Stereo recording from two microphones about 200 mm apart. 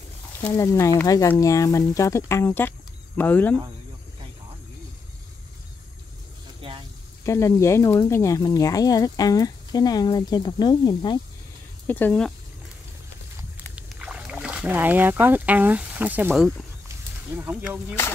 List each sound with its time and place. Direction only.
0.4 s speech: 15° left (ahead or behind)
6.6 s a sound: 30° right (ahead or behind)
7.2 s speech: 15° left (ahead or behind)
11.9 s speech: 10° left (ahead or behind)
13.7 s speech: 5° right (ahead or behind)
17.4 s speech: 10° right (ahead or behind)